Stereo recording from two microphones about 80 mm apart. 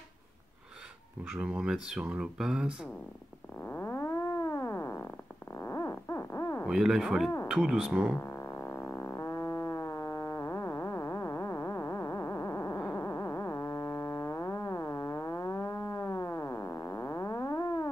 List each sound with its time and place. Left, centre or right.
1.3 s speech: centre
3.6 s synthesizer: left
5.6 s a sound: left
6.7 s a man's voice: centre
8.2 s music: left